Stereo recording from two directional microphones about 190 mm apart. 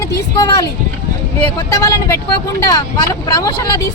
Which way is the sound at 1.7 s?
15° left (ahead or behind).